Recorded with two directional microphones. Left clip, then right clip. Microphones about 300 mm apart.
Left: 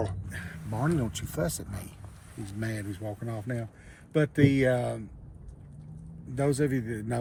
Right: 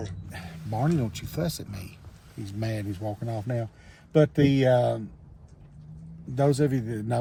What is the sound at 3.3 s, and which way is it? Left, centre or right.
Speech, centre.